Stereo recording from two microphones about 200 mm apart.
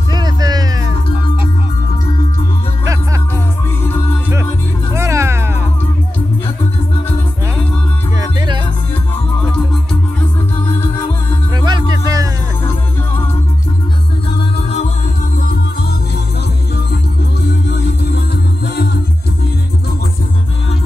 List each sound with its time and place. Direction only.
0.1 s music: 20° right (ahead or behind)
4.9 s music: 15° right (ahead or behind)
8.2 s music: 20° right (ahead or behind)
11.5 s music: 20° right (ahead or behind)